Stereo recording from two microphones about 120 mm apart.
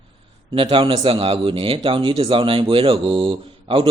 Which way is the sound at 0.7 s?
45° right (ahead or behind).